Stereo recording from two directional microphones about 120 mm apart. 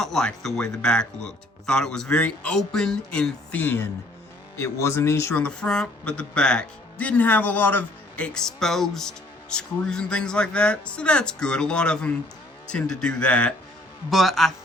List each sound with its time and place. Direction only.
0.0 s speech: 5° left (ahead or behind); by 5.3 s 25° left (ahead or behind)
5.4 s a man's voice: 10° left (ahead or behind)